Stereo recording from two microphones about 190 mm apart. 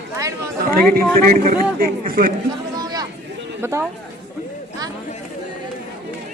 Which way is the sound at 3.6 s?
15° right (ahead or behind).